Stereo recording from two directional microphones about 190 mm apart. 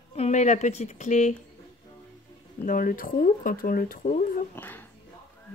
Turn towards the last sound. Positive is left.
turn(degrees=10)  # may be behind; listen again after turning